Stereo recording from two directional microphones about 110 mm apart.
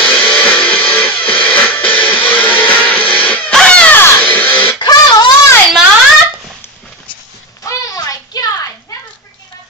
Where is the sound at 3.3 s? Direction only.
10° left (ahead or behind).